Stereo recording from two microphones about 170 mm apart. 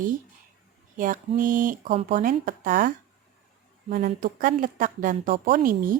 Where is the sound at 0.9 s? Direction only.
50° right (ahead or behind).